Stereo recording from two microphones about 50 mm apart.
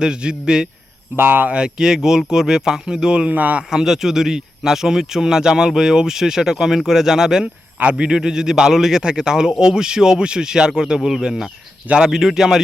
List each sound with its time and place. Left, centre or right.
0.0 s speech: centre
1.1 s speech: right
1.5 s speech: centre
3.7 s speech: centre
7.4 s speech: right